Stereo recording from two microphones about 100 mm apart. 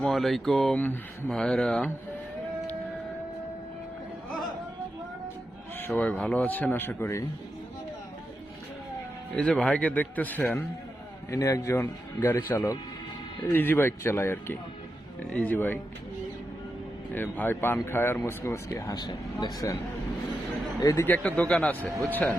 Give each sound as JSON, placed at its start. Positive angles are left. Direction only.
{"t": 0.0, "sound": "speech", "side_deg": 5}
{"t": 5.7, "sound": "speech", "side_deg": 20}
{"t": 9.3, "sound": "speech", "side_deg": 10}
{"t": 11.3, "sound": "speech", "side_deg": 35}
{"t": 17.1, "sound": "speech", "side_deg": 20}
{"t": 18.8, "sound": "speech", "side_deg": 40}
{"t": 21.0, "sound": "speech", "side_deg": 15}